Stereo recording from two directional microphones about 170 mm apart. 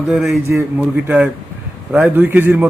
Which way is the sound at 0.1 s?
5° right (ahead or behind).